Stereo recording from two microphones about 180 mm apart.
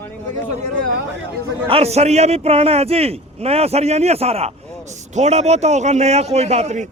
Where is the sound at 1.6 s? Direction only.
35° right (ahead or behind).